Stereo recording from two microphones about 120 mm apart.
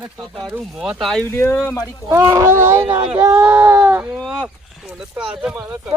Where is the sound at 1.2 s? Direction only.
20° left (ahead or behind).